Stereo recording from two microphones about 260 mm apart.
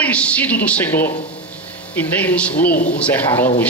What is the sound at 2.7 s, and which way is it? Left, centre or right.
Speech, left.